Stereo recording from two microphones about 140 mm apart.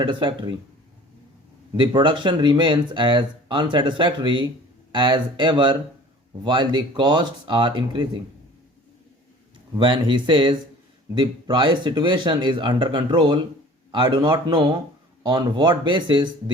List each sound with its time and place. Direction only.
0.0 s speech: 35° right (ahead or behind)
1.7 s speech: 35° right (ahead or behind)
9.7 s speech: 35° right (ahead or behind)